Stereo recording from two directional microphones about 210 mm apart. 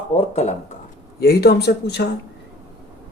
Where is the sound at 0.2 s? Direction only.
30° left (ahead or behind).